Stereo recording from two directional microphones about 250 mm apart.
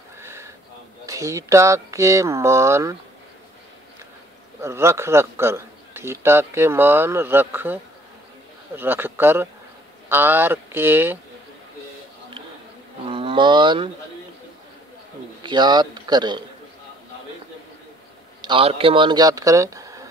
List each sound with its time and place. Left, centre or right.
0.2 s horse: centre
1.0 s a man's voice: centre
4.6 s a man's voice: centre
13.1 s cattle: centre
15.4 s a man's voice: centre
18.4 s speech: right